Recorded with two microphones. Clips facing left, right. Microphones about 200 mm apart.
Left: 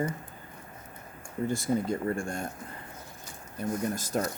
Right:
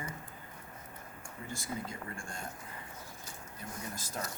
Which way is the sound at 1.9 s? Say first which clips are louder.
Left 14 dB; 65° left (ahead or behind).